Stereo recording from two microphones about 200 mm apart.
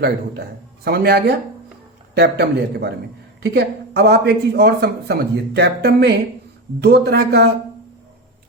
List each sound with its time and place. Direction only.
0.9 s a man's voice: 50° right (ahead or behind)